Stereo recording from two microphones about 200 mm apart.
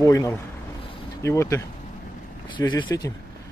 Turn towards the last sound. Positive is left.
turn(degrees=20)  # may be behind; listen again after turning